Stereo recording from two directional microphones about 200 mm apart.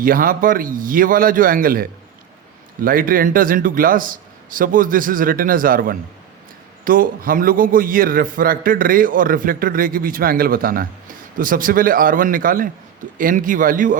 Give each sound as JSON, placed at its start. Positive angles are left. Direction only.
{"t": 0.0, "sound": "a man's voice", "side_deg": -45}